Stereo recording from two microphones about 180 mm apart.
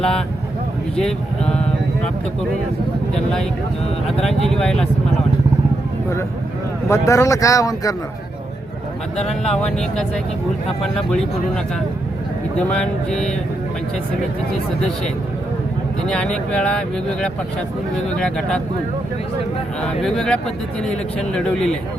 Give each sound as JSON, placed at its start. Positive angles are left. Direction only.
{"t": 0.9, "sound": "speech", "side_deg": 5}
{"t": 4.0, "sound": "speech", "side_deg": 0}
{"t": 6.8, "sound": "speech", "side_deg": 15}
{"t": 9.4, "sound": "speech", "side_deg": 5}
{"t": 12.5, "sound": "speech", "side_deg": 5}
{"t": 16.0, "sound": "speech", "side_deg": 5}
{"t": 18.2, "sound": "speech", "side_deg": 5}
{"t": 19.8, "sound": "speech", "side_deg": 0}